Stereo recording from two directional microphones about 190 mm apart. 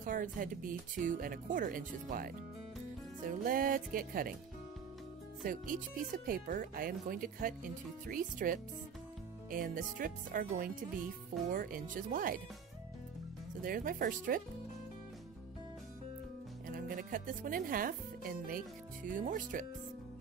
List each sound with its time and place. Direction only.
0.0 s speech: 45° right (ahead or behind)
5.4 s speech: 45° right (ahead or behind)
13.6 s speech: 45° right (ahead or behind)
16.6 s speech: 45° right (ahead or behind)